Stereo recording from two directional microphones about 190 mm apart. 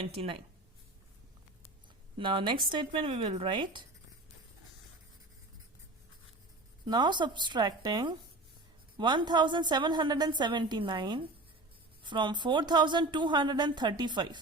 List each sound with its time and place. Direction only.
0.0 s speech: 30° right (ahead or behind)
2.1 s a woman's voice: 25° right (ahead or behind)
6.8 s a woman's voice: 25° right (ahead or behind)